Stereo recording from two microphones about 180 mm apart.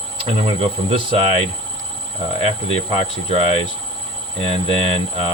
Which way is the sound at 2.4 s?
35° right (ahead or behind).